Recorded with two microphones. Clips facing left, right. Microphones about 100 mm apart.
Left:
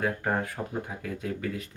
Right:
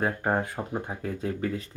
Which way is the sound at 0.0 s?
25° right (ahead or behind).